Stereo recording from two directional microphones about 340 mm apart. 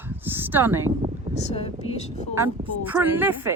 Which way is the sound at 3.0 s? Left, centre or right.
Centre.